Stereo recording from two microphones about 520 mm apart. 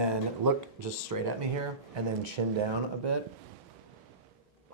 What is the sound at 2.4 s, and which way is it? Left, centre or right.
Speech, right.